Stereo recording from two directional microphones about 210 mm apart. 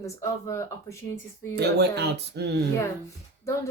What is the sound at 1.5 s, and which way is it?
Speech, 50° right (ahead or behind).